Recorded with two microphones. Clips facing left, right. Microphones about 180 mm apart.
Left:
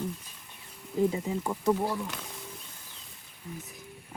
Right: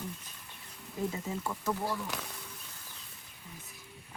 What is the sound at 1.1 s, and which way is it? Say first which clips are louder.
Speech: left 5 dB; 15° left (ahead or behind).